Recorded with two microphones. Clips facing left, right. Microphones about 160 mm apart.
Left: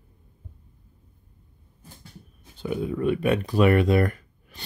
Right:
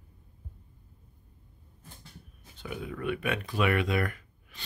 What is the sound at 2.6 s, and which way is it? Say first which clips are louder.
Speech: left 9 dB; 30° left (ahead or behind).